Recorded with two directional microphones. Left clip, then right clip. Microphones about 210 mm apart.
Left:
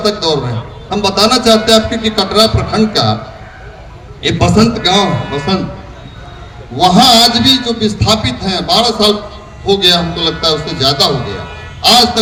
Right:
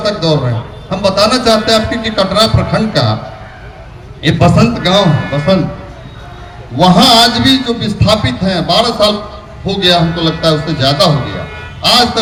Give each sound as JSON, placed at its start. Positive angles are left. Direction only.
{"t": 0.0, "sound": "a man's voice", "side_deg": 50}
{"t": 4.2, "sound": "a man's voice", "side_deg": 50}
{"t": 6.7, "sound": "a man's voice", "side_deg": 50}